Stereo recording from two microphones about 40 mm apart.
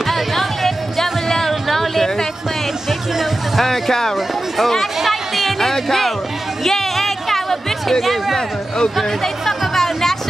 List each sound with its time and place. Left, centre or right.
0.0 s music: centre
3.6 s speech: centre
5.6 s music: centre
8.4 s speech: centre
9.2 s music: centre